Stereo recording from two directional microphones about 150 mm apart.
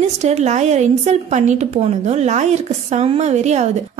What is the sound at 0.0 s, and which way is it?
Speech, 45° right (ahead or behind).